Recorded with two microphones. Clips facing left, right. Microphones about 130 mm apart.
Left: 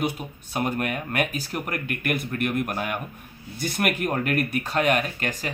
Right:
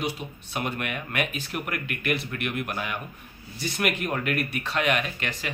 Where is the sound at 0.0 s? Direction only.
45° left (ahead or behind).